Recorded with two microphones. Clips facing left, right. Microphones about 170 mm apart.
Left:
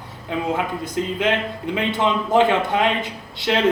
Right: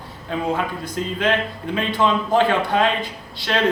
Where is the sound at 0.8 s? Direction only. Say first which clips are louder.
Left 1 dB; 20° left (ahead or behind).